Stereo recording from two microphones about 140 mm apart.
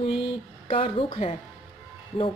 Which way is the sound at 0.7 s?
40° left (ahead or behind).